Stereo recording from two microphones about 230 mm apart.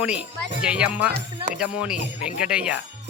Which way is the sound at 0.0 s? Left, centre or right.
Centre.